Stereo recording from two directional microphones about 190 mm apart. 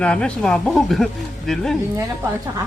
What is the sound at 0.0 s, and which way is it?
Speech, 5° left (ahead or behind).